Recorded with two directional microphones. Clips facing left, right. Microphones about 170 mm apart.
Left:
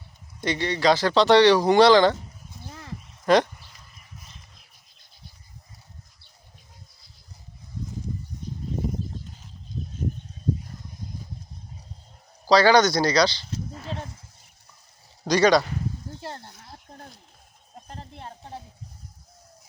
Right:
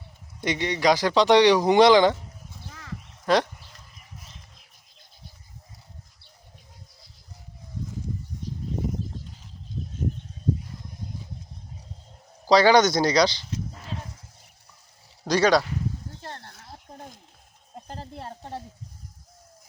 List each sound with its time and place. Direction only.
0.4 s speech: 20° right (ahead or behind)
3.3 s speech: centre (ahead or behind)
12.5 s speech: 20° right (ahead or behind)
15.2 s speech: 5° right (ahead or behind)
16.2 s a sound: 15° left (ahead or behind)
17.8 s speech: 35° right (ahead or behind)